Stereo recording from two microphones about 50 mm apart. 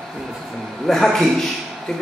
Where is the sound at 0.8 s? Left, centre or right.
Centre.